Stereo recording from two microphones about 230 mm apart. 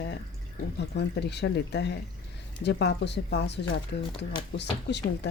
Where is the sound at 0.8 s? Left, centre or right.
Left.